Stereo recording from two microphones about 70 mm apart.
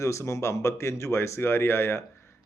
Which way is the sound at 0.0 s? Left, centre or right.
Left.